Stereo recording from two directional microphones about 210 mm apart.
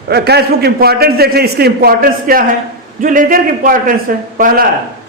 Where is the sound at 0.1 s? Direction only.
50° right (ahead or behind).